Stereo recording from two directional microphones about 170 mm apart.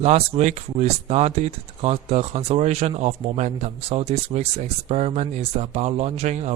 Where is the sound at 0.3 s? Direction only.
45° right (ahead or behind).